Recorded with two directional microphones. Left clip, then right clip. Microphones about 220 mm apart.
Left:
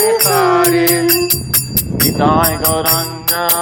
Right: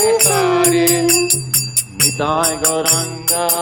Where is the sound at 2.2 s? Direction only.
25° left (ahead or behind).